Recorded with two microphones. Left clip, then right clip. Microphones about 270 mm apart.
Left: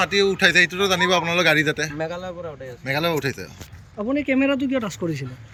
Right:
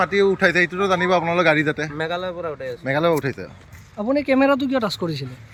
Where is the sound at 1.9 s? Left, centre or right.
Right.